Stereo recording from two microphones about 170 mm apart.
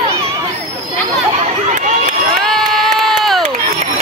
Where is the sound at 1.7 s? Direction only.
50° right (ahead or behind).